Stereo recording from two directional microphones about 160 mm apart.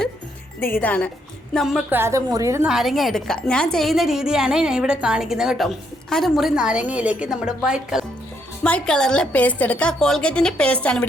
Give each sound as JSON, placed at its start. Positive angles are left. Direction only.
{"t": 0.6, "sound": "a woman's voice", "side_deg": 10}
{"t": 1.9, "sound": "a woman's voice", "side_deg": -15}
{"t": 2.6, "sound": "a woman's voice", "side_deg": 0}